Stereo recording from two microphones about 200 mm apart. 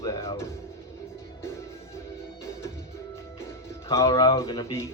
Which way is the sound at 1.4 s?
15° left (ahead or behind).